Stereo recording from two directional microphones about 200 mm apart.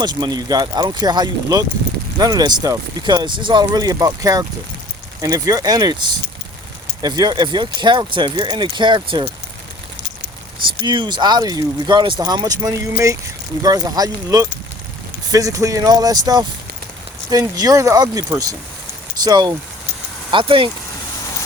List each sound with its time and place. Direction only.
0.0 s speech: 20° right (ahead or behind)
10.8 s speech: 25° right (ahead or behind)